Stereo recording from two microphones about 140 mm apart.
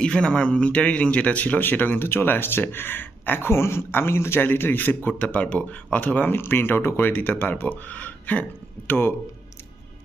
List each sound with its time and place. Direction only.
0.0 s speech: 5° left (ahead or behind)